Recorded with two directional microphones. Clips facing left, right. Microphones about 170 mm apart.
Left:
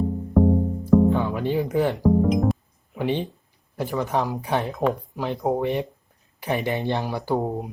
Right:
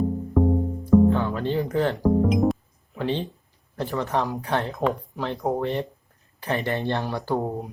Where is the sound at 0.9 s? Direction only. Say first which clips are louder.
Even; 5° left (ahead or behind).